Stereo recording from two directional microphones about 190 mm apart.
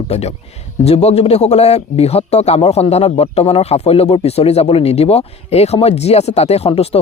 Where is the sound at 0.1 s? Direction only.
35° left (ahead or behind).